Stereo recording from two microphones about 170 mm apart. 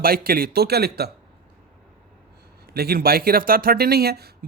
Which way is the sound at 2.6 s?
65° right (ahead or behind).